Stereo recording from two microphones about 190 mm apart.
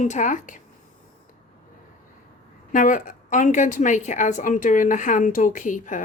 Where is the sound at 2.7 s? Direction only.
45° left (ahead or behind).